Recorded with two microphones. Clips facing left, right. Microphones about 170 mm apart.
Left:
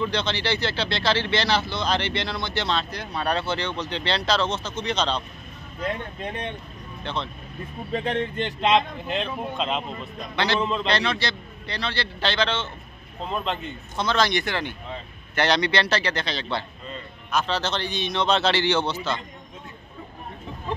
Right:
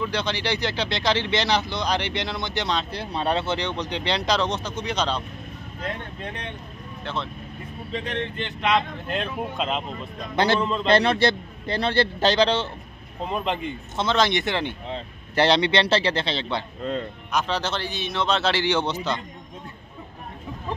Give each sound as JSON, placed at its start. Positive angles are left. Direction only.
{"t": 0.0, "sound": "speech", "side_deg": -10}
{"t": 2.9, "sound": "speech", "side_deg": -30}
{"t": 7.1, "sound": "speech", "side_deg": -5}
{"t": 7.9, "sound": "speech", "side_deg": 45}
{"t": 9.0, "sound": "speech", "side_deg": 0}
{"t": 10.3, "sound": "a man's voice", "side_deg": -45}
{"t": 10.6, "sound": "speech", "side_deg": 0}
{"t": 10.9, "sound": "a man's voice", "side_deg": -55}
{"t": 13.2, "sound": "speech", "side_deg": -15}